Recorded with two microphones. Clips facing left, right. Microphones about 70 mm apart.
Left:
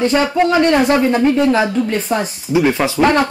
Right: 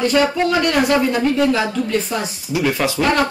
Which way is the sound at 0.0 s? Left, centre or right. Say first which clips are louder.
Left 2 dB; left.